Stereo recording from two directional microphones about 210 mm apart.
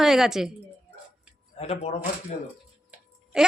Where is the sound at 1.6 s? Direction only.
30° left (ahead or behind).